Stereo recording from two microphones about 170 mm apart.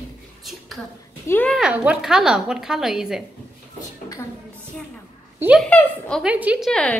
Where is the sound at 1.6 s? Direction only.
5° right (ahead or behind).